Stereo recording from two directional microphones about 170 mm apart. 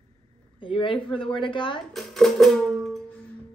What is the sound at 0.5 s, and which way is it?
Speech, 30° left (ahead or behind).